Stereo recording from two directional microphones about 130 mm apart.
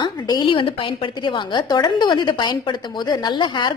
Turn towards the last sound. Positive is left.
turn(degrees=35)  # may be behind; listen again after turning